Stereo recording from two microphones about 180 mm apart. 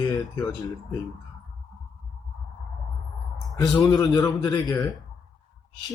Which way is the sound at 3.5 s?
20° left (ahead or behind).